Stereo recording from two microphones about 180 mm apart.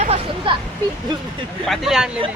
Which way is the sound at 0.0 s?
30° right (ahead or behind).